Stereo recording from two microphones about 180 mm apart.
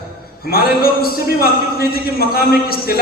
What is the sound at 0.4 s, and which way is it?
A man's voice, 60° left (ahead or behind).